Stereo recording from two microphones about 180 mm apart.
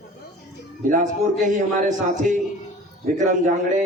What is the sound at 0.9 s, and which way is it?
Speech, 45° right (ahead or behind).